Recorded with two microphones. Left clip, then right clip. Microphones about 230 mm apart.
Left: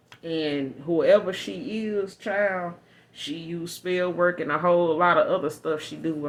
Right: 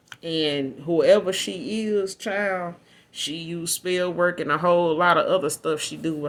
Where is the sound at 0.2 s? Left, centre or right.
Right.